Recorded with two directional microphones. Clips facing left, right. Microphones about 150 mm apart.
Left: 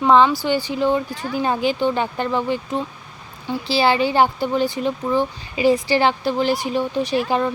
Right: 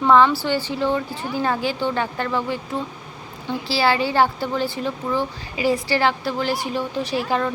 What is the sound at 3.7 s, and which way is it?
Speech, 20° left (ahead or behind).